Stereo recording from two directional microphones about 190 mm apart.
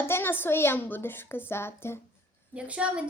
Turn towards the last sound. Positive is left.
turn(degrees=-5)  # may be behind; listen again after turning